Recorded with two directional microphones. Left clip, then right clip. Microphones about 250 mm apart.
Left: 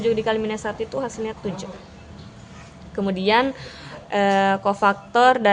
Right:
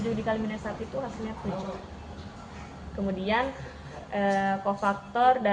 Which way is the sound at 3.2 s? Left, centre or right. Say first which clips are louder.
Left 9 dB; left.